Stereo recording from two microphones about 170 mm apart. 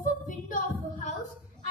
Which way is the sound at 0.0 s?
50° left (ahead or behind).